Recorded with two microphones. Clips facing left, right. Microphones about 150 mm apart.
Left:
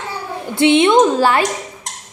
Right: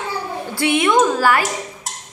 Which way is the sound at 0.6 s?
25° left (ahead or behind).